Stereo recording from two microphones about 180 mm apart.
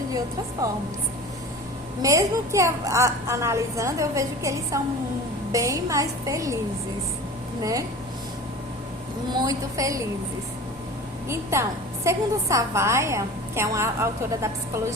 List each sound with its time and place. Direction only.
2.0 s a woman's voice: 20° right (ahead or behind)
7.6 s speech: 20° right (ahead or behind)
9.3 s speech: 20° right (ahead or behind)
12.0 s a woman's voice: 15° right (ahead or behind)